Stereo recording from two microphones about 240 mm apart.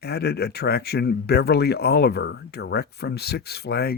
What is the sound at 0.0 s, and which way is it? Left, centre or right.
Speech, left.